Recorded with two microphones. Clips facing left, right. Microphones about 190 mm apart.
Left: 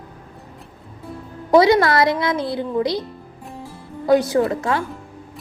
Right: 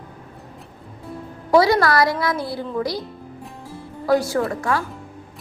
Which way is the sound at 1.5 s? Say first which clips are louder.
Left 2 dB; 20° left (ahead or behind).